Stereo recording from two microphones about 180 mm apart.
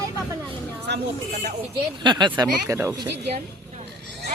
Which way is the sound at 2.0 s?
25° right (ahead or behind).